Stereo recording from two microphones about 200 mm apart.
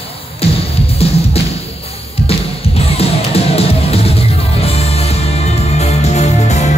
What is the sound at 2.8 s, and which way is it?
Music, 30° left (ahead or behind).